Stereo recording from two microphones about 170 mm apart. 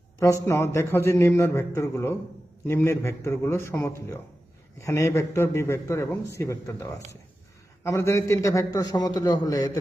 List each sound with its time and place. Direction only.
0.2 s a man's voice: 15° left (ahead or behind)